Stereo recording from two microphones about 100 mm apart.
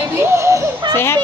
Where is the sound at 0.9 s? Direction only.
25° left (ahead or behind).